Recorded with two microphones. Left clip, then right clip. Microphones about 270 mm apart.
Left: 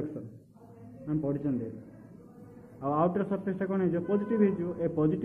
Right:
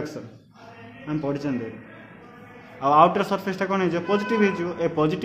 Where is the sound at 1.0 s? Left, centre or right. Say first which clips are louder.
Right 5 dB; centre.